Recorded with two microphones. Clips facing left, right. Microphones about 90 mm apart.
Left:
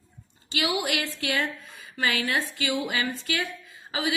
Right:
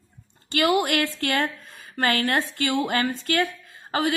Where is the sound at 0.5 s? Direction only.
55° right (ahead or behind).